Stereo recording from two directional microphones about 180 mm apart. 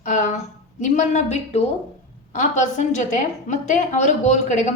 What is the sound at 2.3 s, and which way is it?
A woman's voice, 45° left (ahead or behind).